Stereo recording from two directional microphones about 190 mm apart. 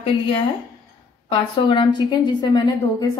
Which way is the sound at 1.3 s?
25° left (ahead or behind).